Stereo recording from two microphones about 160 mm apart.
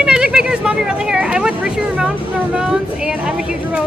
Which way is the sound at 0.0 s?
5° right (ahead or behind).